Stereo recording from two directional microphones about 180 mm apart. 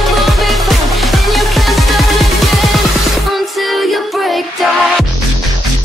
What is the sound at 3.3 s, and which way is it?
Music, centre (ahead or behind).